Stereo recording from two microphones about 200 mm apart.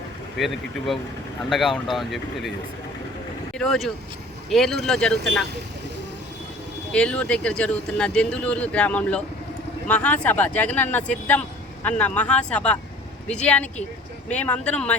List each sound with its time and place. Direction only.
0.3 s speech: centre (ahead or behind)
3.6 s speech: centre (ahead or behind)
6.9 s speech: 5° left (ahead or behind)